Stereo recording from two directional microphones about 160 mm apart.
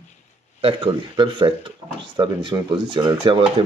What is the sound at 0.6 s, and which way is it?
Speech, 35° right (ahead or behind).